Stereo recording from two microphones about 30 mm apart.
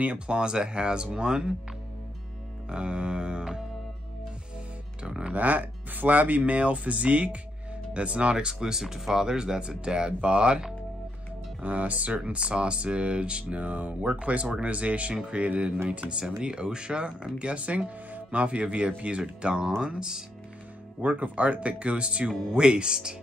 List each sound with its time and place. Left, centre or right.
0.0 s speech: right
0.4 s speech: right
2.7 s music: right
5.0 s music: right
5.3 s speech: right
8.5 s speech: centre
9.6 s speech: right
11.6 s speech: right
12.3 s speech: right
13.4 s speech: right
16.4 s speech: right
17.4 s speech: right
18.6 s speech: right
21.0 s speech: right